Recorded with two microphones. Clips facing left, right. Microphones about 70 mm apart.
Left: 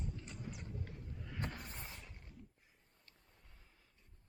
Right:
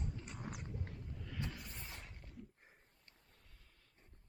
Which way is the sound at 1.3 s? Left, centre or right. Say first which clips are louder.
Left 2 dB; left.